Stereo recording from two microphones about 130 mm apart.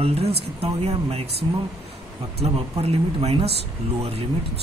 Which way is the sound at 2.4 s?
50° right (ahead or behind).